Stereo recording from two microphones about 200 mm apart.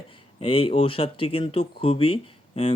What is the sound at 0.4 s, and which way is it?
Speech, 30° left (ahead or behind).